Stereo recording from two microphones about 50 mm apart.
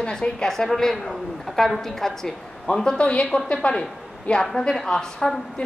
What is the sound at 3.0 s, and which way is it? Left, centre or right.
A woman's voice, left.